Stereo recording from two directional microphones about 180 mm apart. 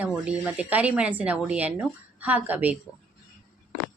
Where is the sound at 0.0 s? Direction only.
10° right (ahead or behind).